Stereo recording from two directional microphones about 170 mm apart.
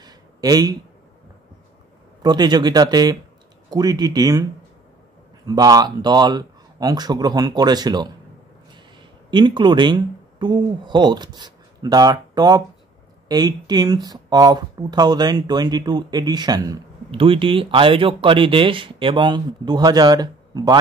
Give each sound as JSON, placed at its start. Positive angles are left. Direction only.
{"t": 0.0, "sound": "a sound", "side_deg": -20}
{"t": 2.2, "sound": "speech", "side_deg": -25}
{"t": 5.5, "sound": "speech", "side_deg": -20}
{"t": 9.3, "sound": "speech", "side_deg": -25}